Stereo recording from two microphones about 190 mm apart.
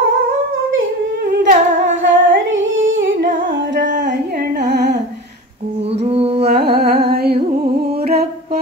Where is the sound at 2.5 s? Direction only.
90° right.